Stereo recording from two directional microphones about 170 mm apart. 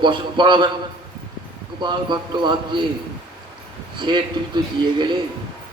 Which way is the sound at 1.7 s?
25° right (ahead or behind).